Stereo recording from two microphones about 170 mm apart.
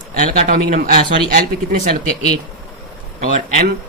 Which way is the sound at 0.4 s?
50° right (ahead or behind).